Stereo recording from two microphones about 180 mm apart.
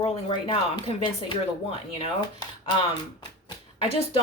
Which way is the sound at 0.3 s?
25° left (ahead or behind).